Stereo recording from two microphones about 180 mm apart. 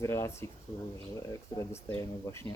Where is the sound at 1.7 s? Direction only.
15° left (ahead or behind).